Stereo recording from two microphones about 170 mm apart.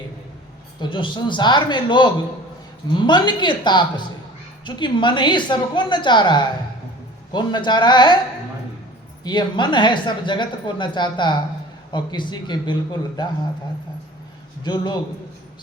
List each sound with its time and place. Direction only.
0.8 s speech: 30° left (ahead or behind)
9.2 s speech: 25° left (ahead or behind)
14.6 s speech: 25° left (ahead or behind)